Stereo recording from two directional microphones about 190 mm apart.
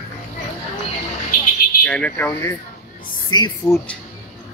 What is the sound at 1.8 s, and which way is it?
Speech, 5° left (ahead or behind).